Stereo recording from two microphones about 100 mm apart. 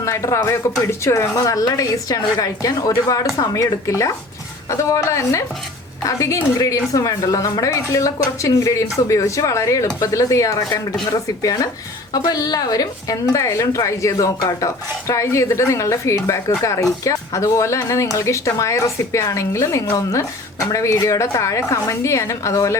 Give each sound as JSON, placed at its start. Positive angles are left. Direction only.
{"t": 0.0, "sound": "a woman's voice", "side_deg": 30}